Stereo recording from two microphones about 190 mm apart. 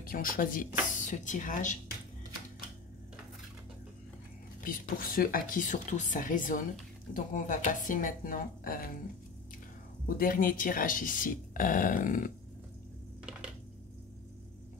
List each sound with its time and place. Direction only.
0.0 s speech: 50° left (ahead or behind)
4.6 s speech: 50° left (ahead or behind)
10.0 s speech: 50° left (ahead or behind)